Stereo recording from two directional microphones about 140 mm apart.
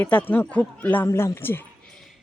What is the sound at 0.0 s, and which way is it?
Speech, 15° left (ahead or behind).